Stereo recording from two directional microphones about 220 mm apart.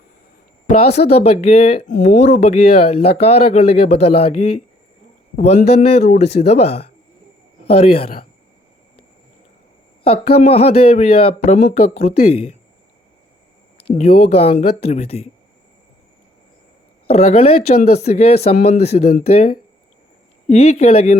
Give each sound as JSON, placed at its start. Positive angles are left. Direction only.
{"t": 0.7, "sound": "speech", "side_deg": 30}
{"t": 10.0, "sound": "speech", "side_deg": 25}
{"t": 13.9, "sound": "speech", "side_deg": 30}
{"t": 17.1, "sound": "speech", "side_deg": 30}